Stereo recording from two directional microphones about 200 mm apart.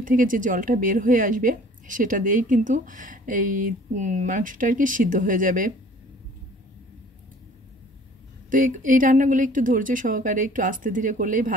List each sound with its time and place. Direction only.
0.0 s a woman's voice: 40° right (ahead or behind)
8.5 s a woman's voice: 40° right (ahead or behind)